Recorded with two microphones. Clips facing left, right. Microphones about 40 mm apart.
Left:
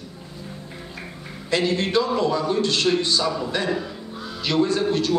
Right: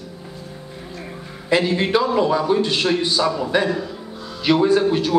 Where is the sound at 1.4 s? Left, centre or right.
Centre.